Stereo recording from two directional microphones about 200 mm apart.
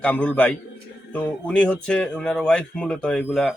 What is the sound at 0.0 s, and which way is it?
A man's voice, 5° left (ahead or behind).